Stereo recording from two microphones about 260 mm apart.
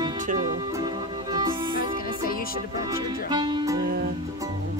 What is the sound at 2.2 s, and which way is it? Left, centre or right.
Music, left.